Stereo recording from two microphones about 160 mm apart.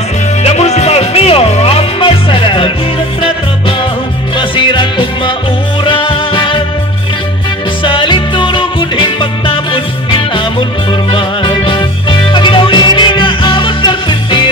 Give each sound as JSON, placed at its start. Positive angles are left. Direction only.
{"t": 0.4, "sound": "music", "side_deg": 40}
{"t": 4.4, "sound": "music", "side_deg": 30}
{"t": 7.8, "sound": "music", "side_deg": 30}